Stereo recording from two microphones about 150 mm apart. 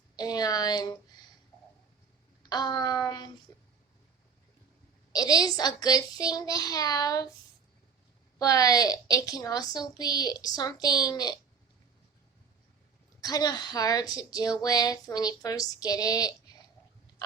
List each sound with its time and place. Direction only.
0.2 s a child's voice: 25° left (ahead or behind)
2.4 s a child's voice: 25° left (ahead or behind)
5.1 s a child's voice: 25° left (ahead or behind)
8.4 s a child's voice: 25° left (ahead or behind)
13.2 s a child's voice: 25° left (ahead or behind)